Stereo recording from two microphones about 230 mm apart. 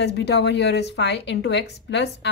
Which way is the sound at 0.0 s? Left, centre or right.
Left.